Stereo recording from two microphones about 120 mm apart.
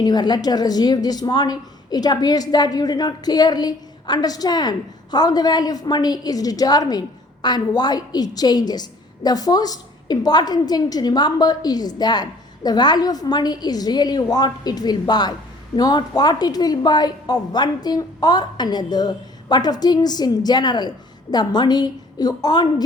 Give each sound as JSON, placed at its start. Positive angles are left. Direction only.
{"t": 0.0, "sound": "a woman's voice", "side_deg": 35}